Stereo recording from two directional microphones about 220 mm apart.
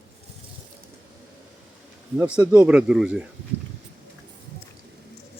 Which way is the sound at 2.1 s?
15° right (ahead or behind).